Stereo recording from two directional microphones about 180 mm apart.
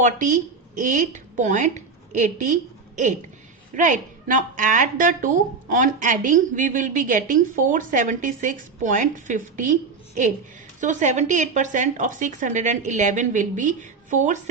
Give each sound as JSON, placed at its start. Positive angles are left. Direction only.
{"t": 0.0, "sound": "a woman's voice", "side_deg": -45}
{"t": 10.8, "sound": "a woman's voice", "side_deg": -45}